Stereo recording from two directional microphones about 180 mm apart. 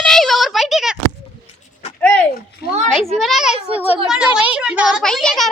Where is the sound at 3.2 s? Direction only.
Centre (ahead or behind).